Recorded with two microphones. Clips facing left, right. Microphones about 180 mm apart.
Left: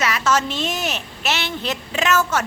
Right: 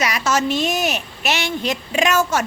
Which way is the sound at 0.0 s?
10° right (ahead or behind).